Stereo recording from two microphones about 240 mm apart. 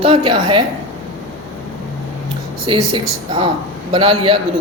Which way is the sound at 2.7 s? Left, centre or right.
Centre.